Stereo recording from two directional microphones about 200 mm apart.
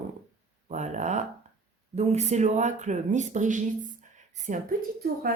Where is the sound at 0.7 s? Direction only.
35° right (ahead or behind).